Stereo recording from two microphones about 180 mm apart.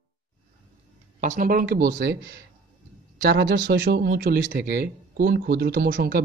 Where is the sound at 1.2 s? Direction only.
50° right (ahead or behind).